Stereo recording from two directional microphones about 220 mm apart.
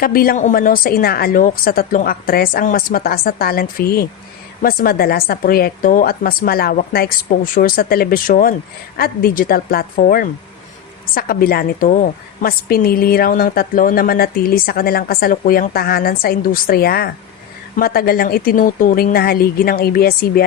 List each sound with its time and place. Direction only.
0.0 s a woman's voice: 40° left (ahead or behind)